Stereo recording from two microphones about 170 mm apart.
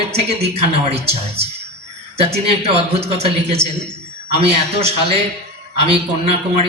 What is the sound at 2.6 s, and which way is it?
A man's voice, 35° right (ahead or behind).